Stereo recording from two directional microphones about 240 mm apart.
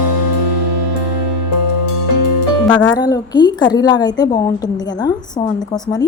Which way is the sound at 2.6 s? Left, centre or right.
Centre.